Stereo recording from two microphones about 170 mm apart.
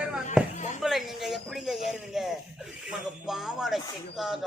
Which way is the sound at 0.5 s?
45° left (ahead or behind).